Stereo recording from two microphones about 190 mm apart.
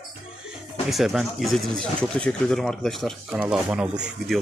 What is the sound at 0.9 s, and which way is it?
Speech, centre (ahead or behind).